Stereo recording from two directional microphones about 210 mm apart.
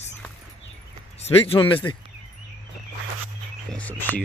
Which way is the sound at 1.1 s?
30° left (ahead or behind).